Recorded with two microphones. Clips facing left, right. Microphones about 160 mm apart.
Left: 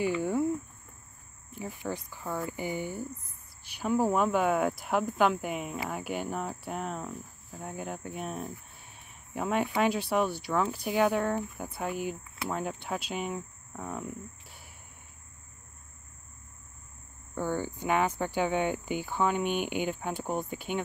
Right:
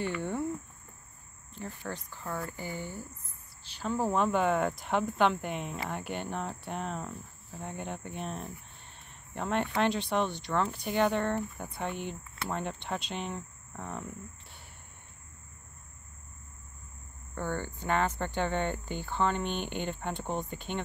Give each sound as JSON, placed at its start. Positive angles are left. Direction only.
{"t": 0.0, "sound": "cricket", "side_deg": 10}
{"t": 1.5, "sound": "speech", "side_deg": 10}
{"t": 17.4, "sound": "speech", "side_deg": 10}